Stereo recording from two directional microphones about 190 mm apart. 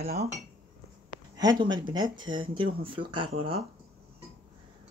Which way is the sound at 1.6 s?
25° right (ahead or behind).